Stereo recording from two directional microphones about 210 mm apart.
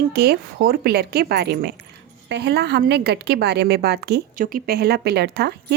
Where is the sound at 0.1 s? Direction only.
50° right (ahead or behind).